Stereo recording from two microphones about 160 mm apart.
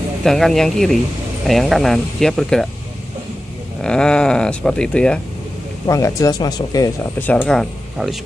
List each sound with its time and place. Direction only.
0.2 s speech: centre (ahead or behind)
3.8 s speech: 5° left (ahead or behind)
5.9 s speech: 20° left (ahead or behind)
7.2 s speech: 10° left (ahead or behind)